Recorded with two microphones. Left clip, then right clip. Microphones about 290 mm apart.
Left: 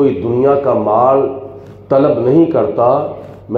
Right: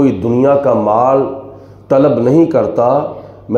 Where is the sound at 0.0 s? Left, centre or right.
Right.